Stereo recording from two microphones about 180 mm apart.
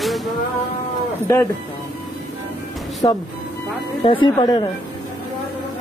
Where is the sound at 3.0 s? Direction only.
25° left (ahead or behind).